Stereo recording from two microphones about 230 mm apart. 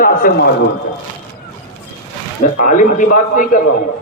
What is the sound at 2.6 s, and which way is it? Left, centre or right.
A man's voice, left.